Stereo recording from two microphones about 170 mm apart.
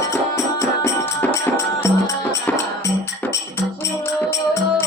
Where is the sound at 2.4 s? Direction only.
15° left (ahead or behind).